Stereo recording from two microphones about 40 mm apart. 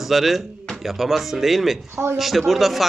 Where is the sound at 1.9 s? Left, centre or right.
Right.